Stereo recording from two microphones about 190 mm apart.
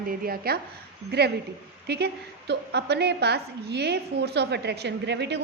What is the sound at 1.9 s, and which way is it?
A woman's voice, 60° right (ahead or behind).